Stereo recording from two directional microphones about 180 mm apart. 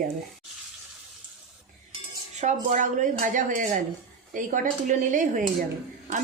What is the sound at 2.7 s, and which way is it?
Speech, 45° right (ahead or behind).